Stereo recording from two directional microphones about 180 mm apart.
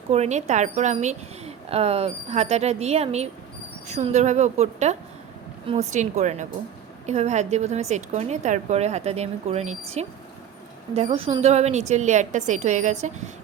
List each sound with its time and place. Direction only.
0.1 s a woman's voice: 40° right (ahead or behind)